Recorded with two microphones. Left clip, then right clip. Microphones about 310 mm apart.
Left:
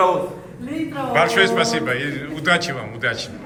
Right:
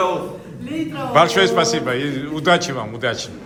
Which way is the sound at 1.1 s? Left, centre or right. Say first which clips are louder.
Right 2 dB; centre.